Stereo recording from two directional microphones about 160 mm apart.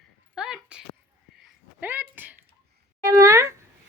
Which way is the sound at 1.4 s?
10° right (ahead or behind).